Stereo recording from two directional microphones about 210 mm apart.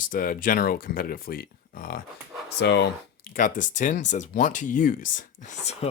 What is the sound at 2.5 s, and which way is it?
Speech, 55° left (ahead or behind).